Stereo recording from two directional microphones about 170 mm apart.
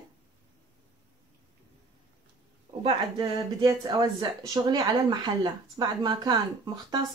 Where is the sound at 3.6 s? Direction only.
20° right (ahead or behind).